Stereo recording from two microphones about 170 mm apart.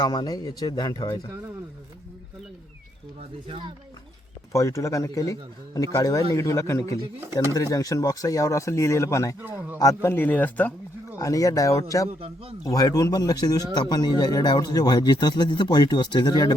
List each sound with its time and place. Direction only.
0.0 s speech: 20° left (ahead or behind)
3.2 s speech: 35° right (ahead or behind)
4.5 s speech: 20° left (ahead or behind)